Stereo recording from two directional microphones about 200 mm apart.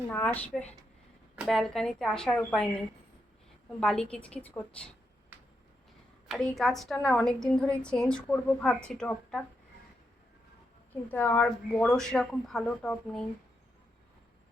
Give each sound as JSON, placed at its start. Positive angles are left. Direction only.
{"t": 0.1, "sound": "a woman's voice", "side_deg": 10}
{"t": 6.2, "sound": "a woman's voice", "side_deg": 0}
{"t": 11.1, "sound": "a woman's voice", "side_deg": 10}